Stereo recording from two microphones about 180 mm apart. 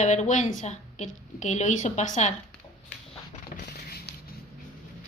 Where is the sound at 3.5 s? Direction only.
65° left (ahead or behind).